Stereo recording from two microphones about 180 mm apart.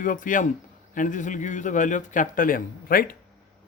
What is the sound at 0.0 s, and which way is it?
Speech, 45° left (ahead or behind).